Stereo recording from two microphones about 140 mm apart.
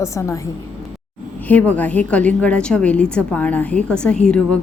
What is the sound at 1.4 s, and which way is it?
A woman's voice, 10° left (ahead or behind).